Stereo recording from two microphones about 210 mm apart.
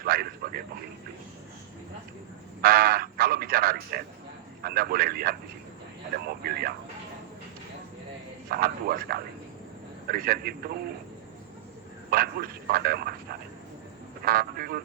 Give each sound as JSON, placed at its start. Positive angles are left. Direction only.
{"t": 0.0, "sound": "speech", "side_deg": -45}
{"t": 2.6, "sound": "speech", "side_deg": -45}
{"t": 8.4, "sound": "speech", "side_deg": -45}
{"t": 12.1, "sound": "speech", "side_deg": -45}
{"t": 14.3, "sound": "speech", "side_deg": -45}